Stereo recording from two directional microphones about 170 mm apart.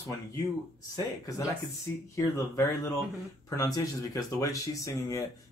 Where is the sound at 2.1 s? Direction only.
15° left (ahead or behind).